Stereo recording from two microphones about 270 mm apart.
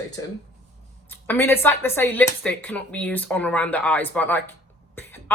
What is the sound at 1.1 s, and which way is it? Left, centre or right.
Speech, centre.